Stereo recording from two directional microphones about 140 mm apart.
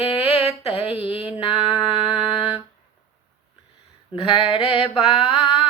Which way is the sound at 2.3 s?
40° left (ahead or behind).